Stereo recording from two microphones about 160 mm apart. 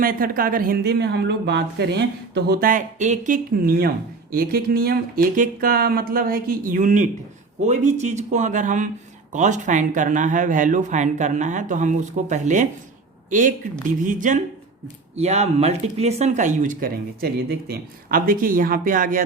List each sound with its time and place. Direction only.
0.0 s speech: 65° right (ahead or behind)
14.0 s speech: 55° right (ahead or behind)